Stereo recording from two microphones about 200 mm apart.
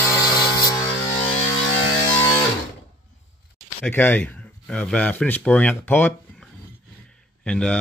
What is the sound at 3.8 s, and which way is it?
Speech, 10° left (ahead or behind).